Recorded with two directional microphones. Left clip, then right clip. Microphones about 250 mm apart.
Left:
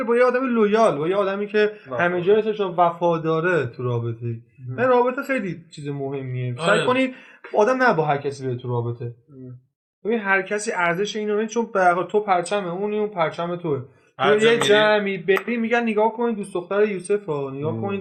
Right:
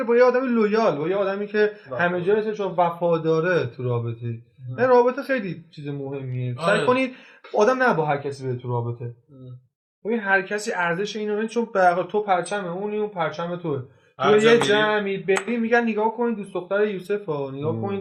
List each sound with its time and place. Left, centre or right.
0.0 s a man's voice: centre
7.5 s a man's voice: centre
10.1 s a man's voice: centre